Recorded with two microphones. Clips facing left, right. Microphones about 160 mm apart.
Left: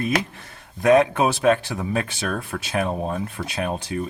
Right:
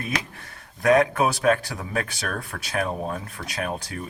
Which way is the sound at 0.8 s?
25° left (ahead or behind).